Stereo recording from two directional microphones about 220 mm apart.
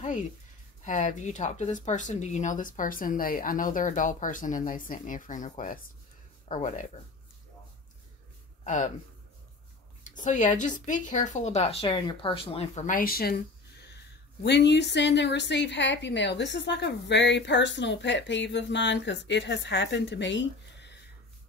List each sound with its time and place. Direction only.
0.8 s speech: 35° left (ahead or behind)
8.6 s speech: 35° left (ahead or behind)
10.0 s a woman's voice: 35° left (ahead or behind); by 21.0 s 50° left (ahead or behind)